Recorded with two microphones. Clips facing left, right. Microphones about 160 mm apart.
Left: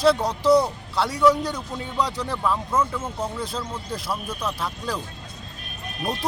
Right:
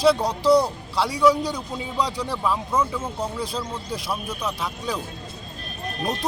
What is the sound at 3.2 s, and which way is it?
Speech, centre (ahead or behind).